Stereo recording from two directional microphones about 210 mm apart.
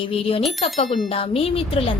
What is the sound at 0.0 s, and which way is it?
Speech, 25° left (ahead or behind).